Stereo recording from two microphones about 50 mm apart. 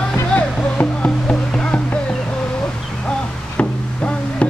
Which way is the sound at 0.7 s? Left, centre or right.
Centre.